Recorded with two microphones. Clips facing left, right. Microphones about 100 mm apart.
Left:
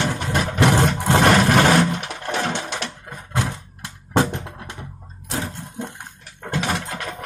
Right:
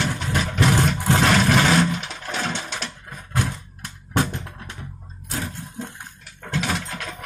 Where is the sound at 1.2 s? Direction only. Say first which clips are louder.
Left 4 dB; 55° left (ahead or behind).